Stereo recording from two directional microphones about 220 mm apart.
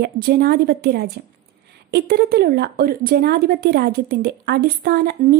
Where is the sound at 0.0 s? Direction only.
45° right (ahead or behind).